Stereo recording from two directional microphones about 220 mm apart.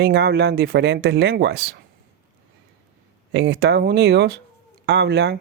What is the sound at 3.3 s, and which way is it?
Speech, 50° right (ahead or behind).